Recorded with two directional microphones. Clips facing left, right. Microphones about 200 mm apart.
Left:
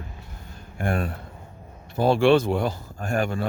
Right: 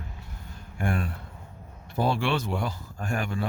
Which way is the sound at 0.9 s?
50° left (ahead or behind).